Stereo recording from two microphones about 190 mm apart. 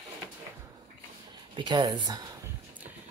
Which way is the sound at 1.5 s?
25° right (ahead or behind).